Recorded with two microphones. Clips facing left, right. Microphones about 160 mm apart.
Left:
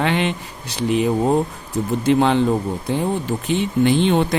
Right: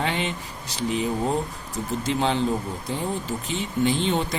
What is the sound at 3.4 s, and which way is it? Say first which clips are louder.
Speech: left 7 dB; 65° left (ahead or behind).